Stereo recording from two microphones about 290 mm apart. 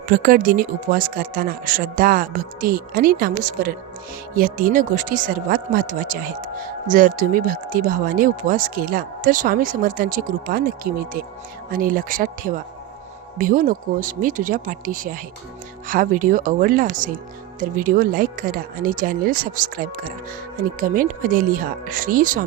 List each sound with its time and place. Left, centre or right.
0.1 s speech: right